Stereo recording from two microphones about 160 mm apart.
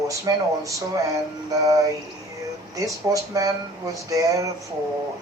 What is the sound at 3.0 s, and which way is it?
Speech, 20° right (ahead or behind).